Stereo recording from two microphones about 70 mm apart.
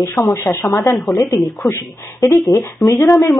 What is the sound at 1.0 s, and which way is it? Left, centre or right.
Speech, left.